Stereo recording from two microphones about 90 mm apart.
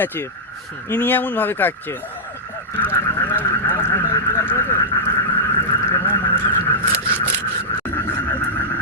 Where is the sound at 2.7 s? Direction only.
20° left (ahead or behind).